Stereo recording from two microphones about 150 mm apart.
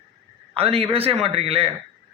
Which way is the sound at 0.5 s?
40° right (ahead or behind).